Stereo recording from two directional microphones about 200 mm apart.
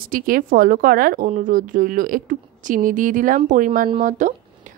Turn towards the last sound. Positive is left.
turn(degrees=-40)  # may be behind; listen again after turning